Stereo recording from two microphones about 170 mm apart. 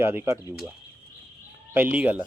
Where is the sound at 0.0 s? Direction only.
15° right (ahead or behind).